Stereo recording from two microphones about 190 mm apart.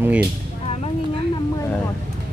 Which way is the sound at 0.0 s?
10° right (ahead or behind).